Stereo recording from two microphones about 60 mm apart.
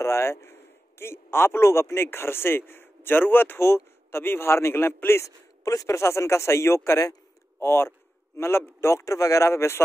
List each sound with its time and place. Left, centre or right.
0.0 s a man's voice: left
5.2 s a man's voice: left